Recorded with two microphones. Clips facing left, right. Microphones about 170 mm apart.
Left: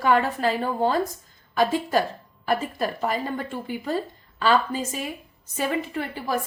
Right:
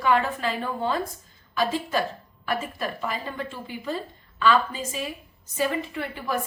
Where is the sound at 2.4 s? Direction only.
35° left (ahead or behind).